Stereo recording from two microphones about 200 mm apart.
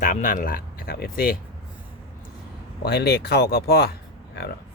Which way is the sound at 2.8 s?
55° left (ahead or behind).